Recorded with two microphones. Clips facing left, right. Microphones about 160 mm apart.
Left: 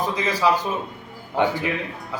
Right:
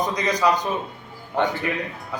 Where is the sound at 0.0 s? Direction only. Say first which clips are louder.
Even; 5° left (ahead or behind).